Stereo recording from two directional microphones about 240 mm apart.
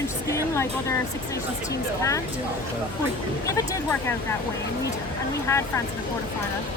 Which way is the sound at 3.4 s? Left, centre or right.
Centre.